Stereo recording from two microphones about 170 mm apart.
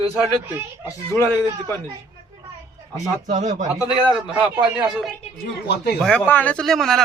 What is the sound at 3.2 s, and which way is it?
Speech, 45° right (ahead or behind).